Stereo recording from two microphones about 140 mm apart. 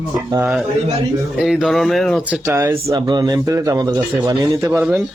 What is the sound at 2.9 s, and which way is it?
Speech, 30° right (ahead or behind).